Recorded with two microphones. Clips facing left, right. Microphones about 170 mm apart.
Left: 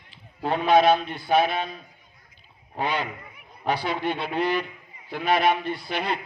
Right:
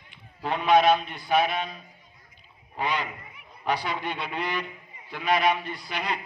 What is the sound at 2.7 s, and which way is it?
A man's voice, 30° left (ahead or behind).